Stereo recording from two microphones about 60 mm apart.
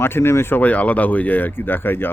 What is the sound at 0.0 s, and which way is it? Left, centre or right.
Speech, left.